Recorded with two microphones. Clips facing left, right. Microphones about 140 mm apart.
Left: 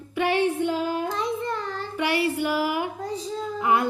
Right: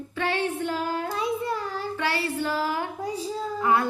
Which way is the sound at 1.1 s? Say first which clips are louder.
Even; 5° right (ahead or behind).